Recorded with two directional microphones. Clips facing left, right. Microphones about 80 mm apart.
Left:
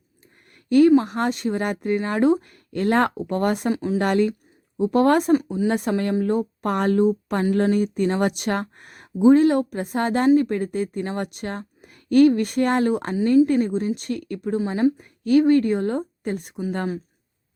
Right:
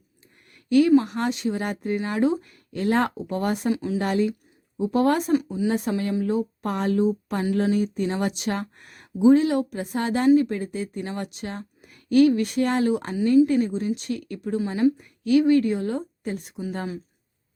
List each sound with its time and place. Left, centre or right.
0.7 s speech: left
3.7 s a woman's voice: left
4.0 s speech: left
14.6 s a woman's voice: left